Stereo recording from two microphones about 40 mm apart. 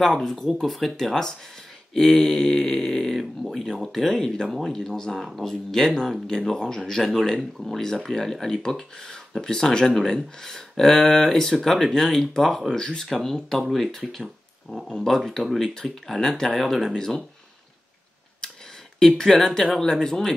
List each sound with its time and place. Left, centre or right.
0.0 s speech: centre
0.5 s speech: centre
4.5 s speech: centre
4.7 s speech: centre
14.2 s speech: centre
16.9 s speech: centre
18.4 s tick: centre
18.9 s speech: centre